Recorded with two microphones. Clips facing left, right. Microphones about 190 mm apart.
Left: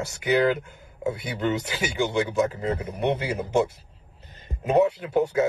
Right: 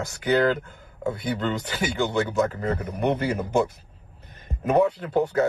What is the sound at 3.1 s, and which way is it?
Speech, 10° left (ahead or behind).